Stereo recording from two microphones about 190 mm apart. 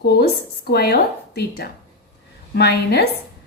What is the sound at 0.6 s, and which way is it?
A woman's voice, 55° left (ahead or behind).